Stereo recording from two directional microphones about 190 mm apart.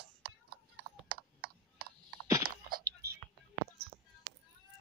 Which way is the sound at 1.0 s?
50° right (ahead or behind).